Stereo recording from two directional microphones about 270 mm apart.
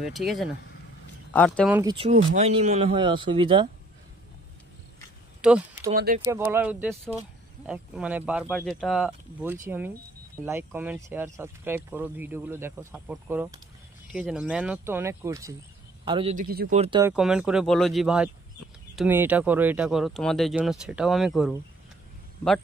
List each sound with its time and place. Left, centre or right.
0.0 s speech: centre
1.7 s speech: centre
2.0 s speech: right
5.4 s speech: centre
5.9 s speech: right
6.2 s speech: centre
16.4 s speech: right
17.0 s speech: centre